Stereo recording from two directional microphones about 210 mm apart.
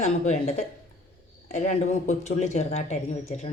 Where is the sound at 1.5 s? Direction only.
30° left (ahead or behind).